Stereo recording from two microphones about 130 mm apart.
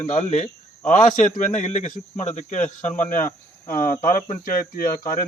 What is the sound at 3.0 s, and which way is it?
Speech, 85° left.